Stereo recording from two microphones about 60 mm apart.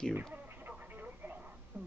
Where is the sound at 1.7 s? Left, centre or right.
Right.